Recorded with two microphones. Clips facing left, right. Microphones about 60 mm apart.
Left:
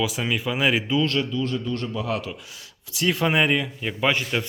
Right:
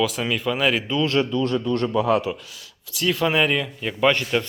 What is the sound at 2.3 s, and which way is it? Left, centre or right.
Speech, right.